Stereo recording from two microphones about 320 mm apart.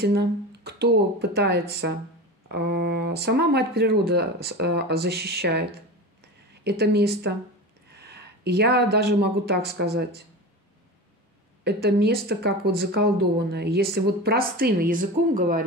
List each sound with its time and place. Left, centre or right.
0.0 s speech: right
11.6 s speech: right